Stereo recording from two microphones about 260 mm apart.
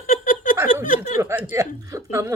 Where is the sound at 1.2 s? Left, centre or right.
Centre.